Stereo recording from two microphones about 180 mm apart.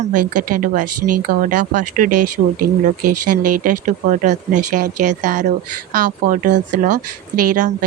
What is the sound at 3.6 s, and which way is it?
A woman's voice, 45° right (ahead or behind).